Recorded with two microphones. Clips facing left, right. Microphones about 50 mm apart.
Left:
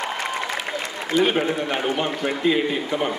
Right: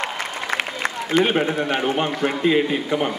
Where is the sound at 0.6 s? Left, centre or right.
Right.